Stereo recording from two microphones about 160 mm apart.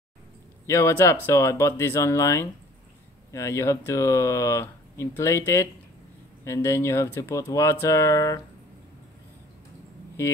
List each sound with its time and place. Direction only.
0.7 s speech: 15° left (ahead or behind)
10.2 s speech: 15° left (ahead or behind)